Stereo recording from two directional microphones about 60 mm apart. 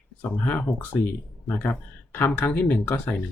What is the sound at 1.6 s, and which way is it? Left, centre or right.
Speech, left.